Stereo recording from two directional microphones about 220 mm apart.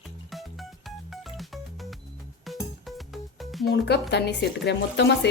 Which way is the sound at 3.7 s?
50° left (ahead or behind).